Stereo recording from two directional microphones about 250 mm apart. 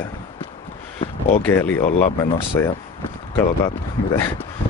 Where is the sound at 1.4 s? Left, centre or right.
Centre.